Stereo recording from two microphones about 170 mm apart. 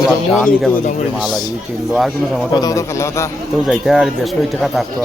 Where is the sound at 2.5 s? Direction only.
20° left (ahead or behind).